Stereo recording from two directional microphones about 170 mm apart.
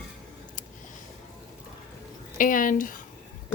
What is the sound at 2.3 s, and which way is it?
Speech, 55° left (ahead or behind).